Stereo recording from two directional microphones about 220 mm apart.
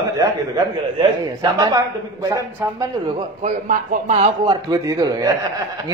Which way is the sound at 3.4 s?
35° right (ahead or behind).